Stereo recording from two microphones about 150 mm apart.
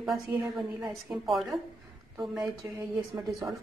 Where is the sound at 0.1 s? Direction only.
20° right (ahead or behind).